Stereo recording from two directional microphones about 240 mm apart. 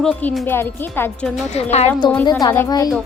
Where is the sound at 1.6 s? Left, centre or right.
Left.